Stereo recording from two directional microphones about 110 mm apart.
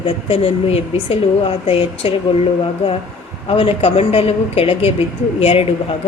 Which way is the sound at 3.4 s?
55° left (ahead or behind).